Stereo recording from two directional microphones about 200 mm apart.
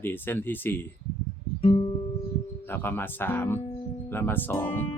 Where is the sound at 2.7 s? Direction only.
10° left (ahead or behind).